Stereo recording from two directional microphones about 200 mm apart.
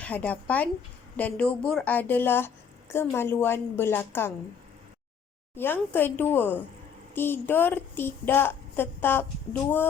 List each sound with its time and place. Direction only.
0.0 s a woman's voice: 5° left (ahead or behind)
5.5 s a woman's voice: 10° left (ahead or behind)